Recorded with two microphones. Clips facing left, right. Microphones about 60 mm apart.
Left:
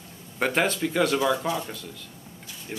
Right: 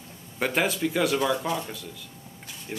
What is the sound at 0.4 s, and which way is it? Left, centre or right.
Speech, centre.